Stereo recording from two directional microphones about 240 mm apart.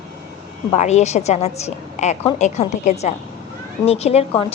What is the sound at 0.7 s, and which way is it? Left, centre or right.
A woman's voice, left.